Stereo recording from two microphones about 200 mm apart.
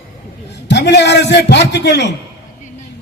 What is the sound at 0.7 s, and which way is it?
A man's voice, 55° left (ahead or behind).